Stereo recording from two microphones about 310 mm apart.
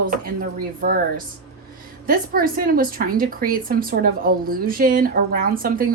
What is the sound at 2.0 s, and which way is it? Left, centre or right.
A woman's voice, right.